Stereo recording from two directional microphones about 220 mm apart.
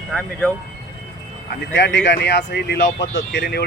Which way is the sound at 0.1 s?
5° left (ahead or behind).